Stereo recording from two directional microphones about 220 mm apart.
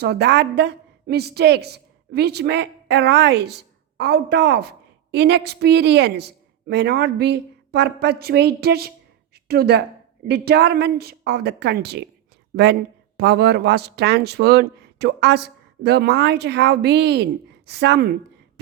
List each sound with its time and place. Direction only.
0.0 s a woman's voice: 50° right (ahead or behind)
9.3 s a sound: 45° right (ahead or behind)
10.2 s speech: 45° right (ahead or behind)